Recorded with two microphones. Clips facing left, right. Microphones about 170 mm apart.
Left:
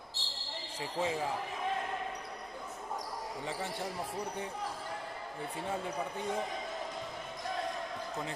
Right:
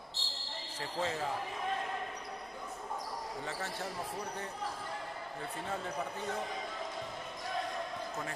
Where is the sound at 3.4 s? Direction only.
15° left (ahead or behind).